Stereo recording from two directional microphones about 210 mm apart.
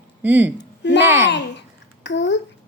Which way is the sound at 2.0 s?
55° left (ahead or behind).